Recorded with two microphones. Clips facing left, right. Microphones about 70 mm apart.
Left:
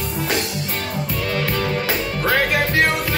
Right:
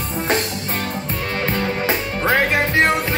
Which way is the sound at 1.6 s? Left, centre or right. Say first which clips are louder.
Right 1 dB; right.